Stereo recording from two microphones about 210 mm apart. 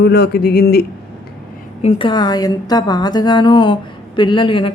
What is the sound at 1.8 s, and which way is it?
A woman's voice, 25° left (ahead or behind).